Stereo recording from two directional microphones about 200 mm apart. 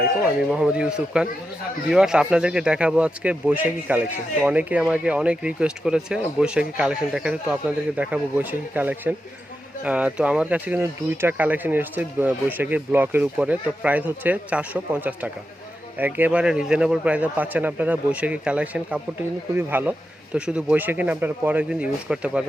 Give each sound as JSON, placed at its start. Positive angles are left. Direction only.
{"t": 0.5, "sound": "speech", "side_deg": -5}